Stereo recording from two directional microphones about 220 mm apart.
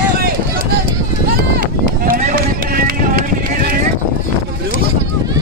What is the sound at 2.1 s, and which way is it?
Run, 35° right (ahead or behind).